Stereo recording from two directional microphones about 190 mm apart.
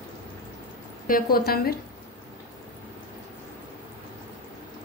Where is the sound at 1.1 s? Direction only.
50° left (ahead or behind).